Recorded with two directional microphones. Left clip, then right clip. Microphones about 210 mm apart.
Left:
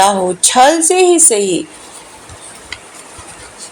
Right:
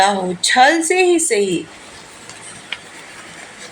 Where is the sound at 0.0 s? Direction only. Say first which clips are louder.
Left 4 dB; 30° left (ahead or behind).